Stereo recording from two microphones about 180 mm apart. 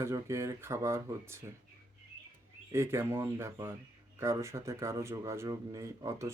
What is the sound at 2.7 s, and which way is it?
Speech, 15° right (ahead or behind).